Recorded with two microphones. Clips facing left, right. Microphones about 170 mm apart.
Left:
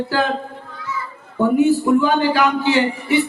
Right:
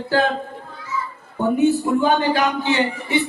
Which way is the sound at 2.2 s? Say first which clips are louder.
Left 3 dB; 20° right (ahead or behind).